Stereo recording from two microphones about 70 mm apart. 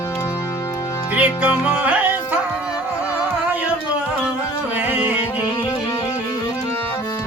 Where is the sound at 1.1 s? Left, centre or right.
Centre.